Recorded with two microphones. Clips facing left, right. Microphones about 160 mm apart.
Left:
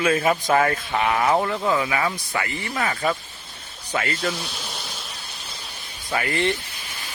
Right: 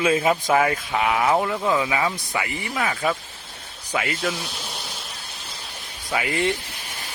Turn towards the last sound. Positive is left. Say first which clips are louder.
# even
turn(degrees=-10)  # may be behind; listen again after turning